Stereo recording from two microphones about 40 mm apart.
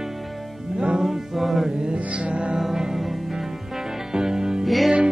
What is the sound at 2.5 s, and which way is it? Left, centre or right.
Music, centre.